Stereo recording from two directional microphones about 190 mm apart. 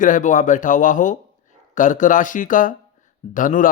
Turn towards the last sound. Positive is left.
turn(degrees=45)  # may be behind; listen again after turning